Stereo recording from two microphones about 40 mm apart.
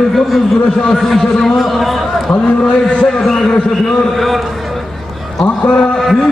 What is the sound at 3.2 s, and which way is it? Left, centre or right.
A man's voice, centre.